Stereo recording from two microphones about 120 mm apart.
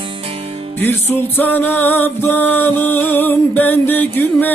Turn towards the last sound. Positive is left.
turn(degrees=15)  # may be behind; listen again after turning